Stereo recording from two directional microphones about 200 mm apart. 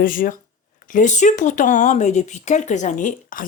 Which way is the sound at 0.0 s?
45° left (ahead or behind).